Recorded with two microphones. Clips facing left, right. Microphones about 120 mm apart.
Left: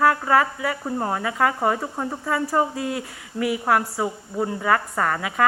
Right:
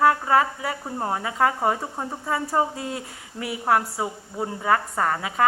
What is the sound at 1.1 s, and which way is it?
A woman's voice, 35° right (ahead or behind).